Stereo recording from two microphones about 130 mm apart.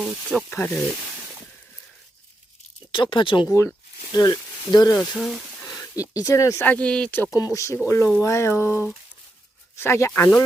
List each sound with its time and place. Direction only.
0.0 s speech: 10° right (ahead or behind)
0.5 s speech: 10° left (ahead or behind)
2.9 s speech: 40° left (ahead or behind)
4.9 s speech: 5° left (ahead or behind)
6.0 s speech: 25° left (ahead or behind)
6.7 s speech: 10° left (ahead or behind)
7.3 s speech: 25° left (ahead or behind)